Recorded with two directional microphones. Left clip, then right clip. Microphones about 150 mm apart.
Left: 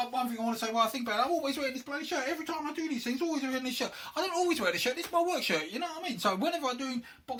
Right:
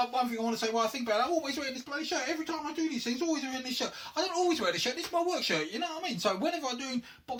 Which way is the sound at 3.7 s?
20° left (ahead or behind).